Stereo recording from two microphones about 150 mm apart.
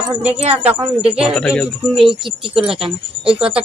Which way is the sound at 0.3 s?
45° right (ahead or behind).